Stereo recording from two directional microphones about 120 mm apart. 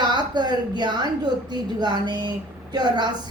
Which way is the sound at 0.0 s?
40° right (ahead or behind).